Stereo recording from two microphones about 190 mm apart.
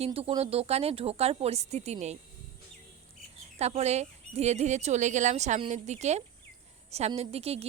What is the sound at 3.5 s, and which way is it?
A woman's voice, 35° right (ahead or behind).